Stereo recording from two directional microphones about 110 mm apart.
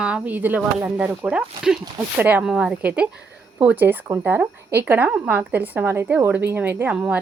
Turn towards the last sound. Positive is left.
turn(degrees=-10)  # may be behind; listen again after turning